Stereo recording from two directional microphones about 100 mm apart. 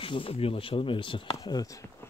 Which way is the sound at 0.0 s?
65° left (ahead or behind).